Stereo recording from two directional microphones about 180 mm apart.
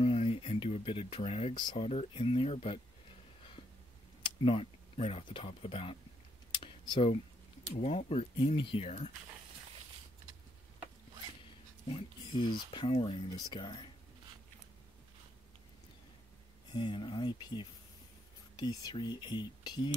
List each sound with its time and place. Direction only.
0.0 s speech: 30° left (ahead or behind)
4.2 s speech: 30° left (ahead or behind)
6.5 s a sound: 25° left (ahead or behind)
7.7 s speech: 35° left (ahead or behind)
12.7 s speech: 30° left (ahead or behind)
16.7 s speech: 25° left (ahead or behind)